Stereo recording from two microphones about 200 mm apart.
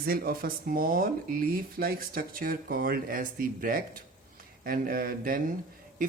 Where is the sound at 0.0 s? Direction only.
50° right (ahead or behind).